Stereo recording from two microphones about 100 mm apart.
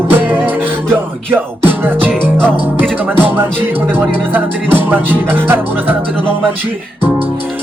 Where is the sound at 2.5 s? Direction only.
20° right (ahead or behind).